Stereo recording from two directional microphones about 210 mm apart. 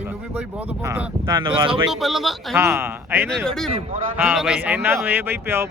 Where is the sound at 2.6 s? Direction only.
10° right (ahead or behind).